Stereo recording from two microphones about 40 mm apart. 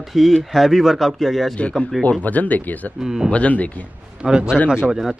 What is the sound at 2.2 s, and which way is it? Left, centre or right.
Speech, left.